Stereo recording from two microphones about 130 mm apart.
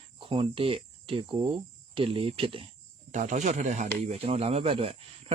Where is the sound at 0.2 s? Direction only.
40° right (ahead or behind).